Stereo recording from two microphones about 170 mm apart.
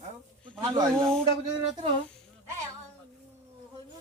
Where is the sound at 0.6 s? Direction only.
20° right (ahead or behind).